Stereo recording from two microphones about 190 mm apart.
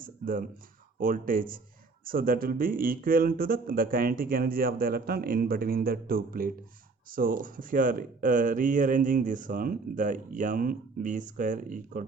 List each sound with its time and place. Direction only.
0.0 s speech: 45° right (ahead or behind)